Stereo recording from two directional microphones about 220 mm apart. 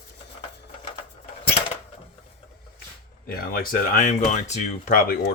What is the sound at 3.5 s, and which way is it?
Speech, 40° left (ahead or behind).